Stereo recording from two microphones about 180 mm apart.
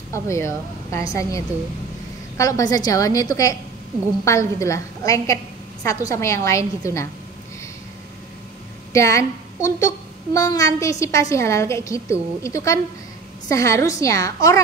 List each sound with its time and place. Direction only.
0.1 s a child's voice: 15° left (ahead or behind)
2.3 s a woman's voice: 15° left (ahead or behind)
8.9 s a child's voice: 15° left (ahead or behind)